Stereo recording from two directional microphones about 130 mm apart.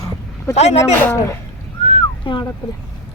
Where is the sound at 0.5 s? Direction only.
55° left (ahead or behind).